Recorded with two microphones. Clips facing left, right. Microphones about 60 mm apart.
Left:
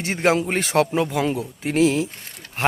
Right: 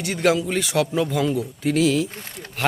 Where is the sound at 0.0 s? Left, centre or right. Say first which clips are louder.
Even; left.